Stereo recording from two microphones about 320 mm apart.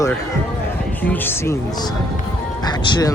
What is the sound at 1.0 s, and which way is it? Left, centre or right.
A man's voice, centre.